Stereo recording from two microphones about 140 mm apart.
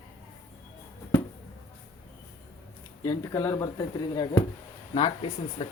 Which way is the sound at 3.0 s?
25° left (ahead or behind).